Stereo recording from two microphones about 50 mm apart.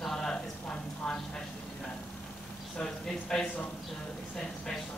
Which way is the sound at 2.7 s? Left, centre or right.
Centre.